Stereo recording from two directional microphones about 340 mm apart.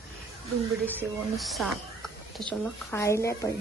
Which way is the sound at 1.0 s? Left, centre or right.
Centre.